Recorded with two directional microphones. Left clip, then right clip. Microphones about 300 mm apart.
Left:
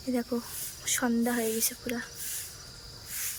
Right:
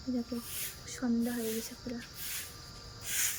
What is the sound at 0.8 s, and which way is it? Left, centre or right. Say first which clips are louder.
Speech: left 10 dB; centre.